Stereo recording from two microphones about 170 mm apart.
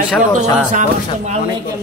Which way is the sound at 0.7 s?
40° right (ahead or behind).